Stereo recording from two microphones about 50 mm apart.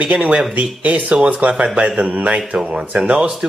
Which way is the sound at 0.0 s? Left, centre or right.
Right.